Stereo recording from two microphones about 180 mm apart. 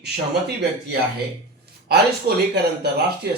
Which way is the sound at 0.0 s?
65° right (ahead or behind).